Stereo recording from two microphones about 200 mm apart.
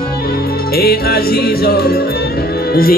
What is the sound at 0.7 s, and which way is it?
Music, 50° left (ahead or behind).